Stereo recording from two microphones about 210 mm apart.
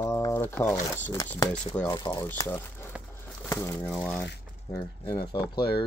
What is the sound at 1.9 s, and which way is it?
Speech, 20° left (ahead or behind).